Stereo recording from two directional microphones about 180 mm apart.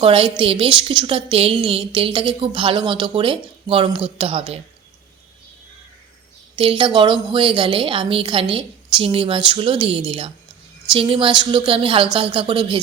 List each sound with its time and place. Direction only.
0.0 s a woman's voice: 30° right (ahead or behind)
6.6 s a woman's voice: 30° right (ahead or behind)